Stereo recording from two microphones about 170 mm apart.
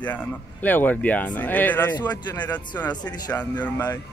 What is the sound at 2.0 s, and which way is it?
Speech, 25° left (ahead or behind).